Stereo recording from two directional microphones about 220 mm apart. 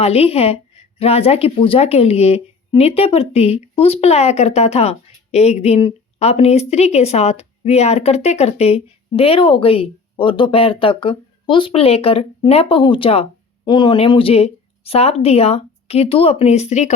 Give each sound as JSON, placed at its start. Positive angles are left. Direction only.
{"t": 0.0, "sound": "speech", "side_deg": 30}